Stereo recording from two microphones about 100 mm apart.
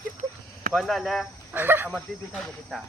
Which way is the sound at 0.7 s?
Centre (ahead or behind).